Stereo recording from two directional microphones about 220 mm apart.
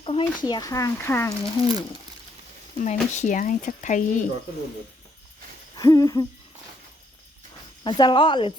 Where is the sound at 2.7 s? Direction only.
35° left (ahead or behind).